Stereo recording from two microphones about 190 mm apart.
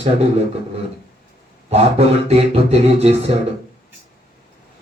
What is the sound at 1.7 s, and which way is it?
Mantra, 35° right (ahead or behind).